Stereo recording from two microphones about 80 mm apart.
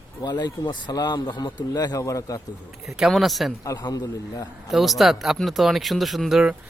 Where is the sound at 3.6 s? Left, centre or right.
Left.